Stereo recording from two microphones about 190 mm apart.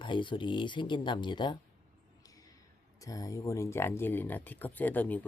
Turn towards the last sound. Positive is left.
turn(degrees=10)  # may be behind; listen again after turning